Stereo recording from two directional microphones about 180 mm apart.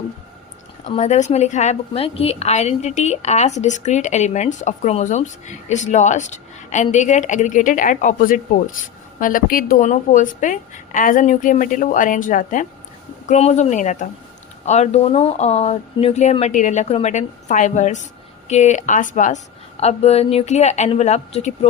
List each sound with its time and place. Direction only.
0.9 s a woman's voice: 40° left (ahead or behind)